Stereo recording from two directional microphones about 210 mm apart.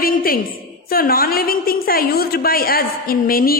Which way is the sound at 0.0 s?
45° left (ahead or behind).